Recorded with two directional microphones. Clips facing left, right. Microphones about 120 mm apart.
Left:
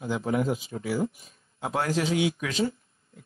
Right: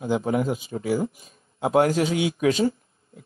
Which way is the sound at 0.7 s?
40° right (ahead or behind).